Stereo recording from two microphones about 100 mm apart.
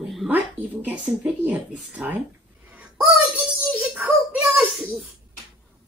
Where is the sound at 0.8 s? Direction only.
15° right (ahead or behind).